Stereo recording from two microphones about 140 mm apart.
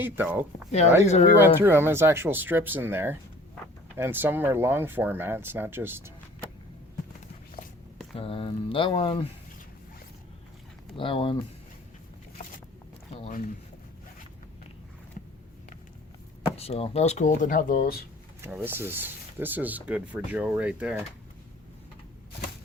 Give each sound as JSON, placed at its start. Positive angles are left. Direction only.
{"t": 0.0, "sound": "speech", "side_deg": -15}
{"t": 1.0, "sound": "speech", "side_deg": 50}
{"t": 1.4, "sound": "speech", "side_deg": -15}
{"t": 8.1, "sound": "speech", "side_deg": 40}
{"t": 10.9, "sound": "speech", "side_deg": 40}
{"t": 13.2, "sound": "speech", "side_deg": 80}
{"t": 16.6, "sound": "speech", "side_deg": 45}
{"t": 18.4, "sound": "speech", "side_deg": -15}